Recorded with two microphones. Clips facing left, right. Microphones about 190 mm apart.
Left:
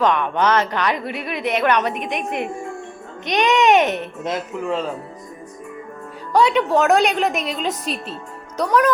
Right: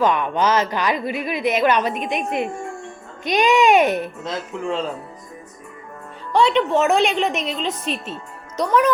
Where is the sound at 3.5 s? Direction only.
10° right (ahead or behind).